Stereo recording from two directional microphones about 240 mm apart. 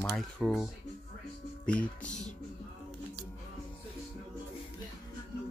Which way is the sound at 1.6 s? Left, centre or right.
Centre.